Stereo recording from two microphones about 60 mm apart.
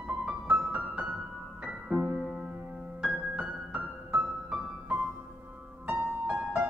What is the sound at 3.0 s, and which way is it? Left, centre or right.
Music, centre.